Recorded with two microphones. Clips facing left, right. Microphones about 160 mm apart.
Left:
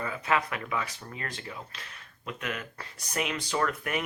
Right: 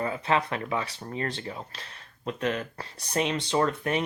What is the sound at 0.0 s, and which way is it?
Speech, 30° right (ahead or behind).